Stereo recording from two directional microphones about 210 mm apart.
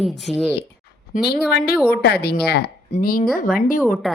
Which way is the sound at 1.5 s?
50° left (ahead or behind).